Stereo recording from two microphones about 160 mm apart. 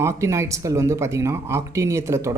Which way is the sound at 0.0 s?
20° right (ahead or behind).